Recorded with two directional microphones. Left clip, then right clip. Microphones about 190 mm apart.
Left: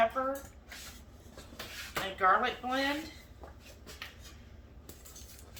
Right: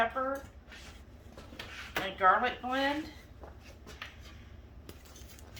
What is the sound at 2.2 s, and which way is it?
Speech, centre (ahead or behind).